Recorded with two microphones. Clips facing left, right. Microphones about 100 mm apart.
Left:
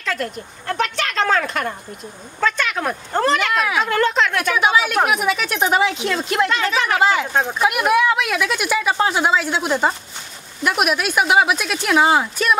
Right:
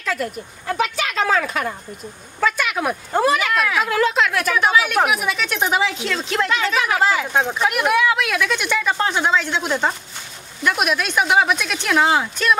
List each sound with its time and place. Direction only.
0.0 s speech: 5° right (ahead or behind)